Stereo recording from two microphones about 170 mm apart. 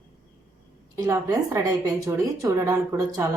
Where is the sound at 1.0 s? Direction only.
20° right (ahead or behind).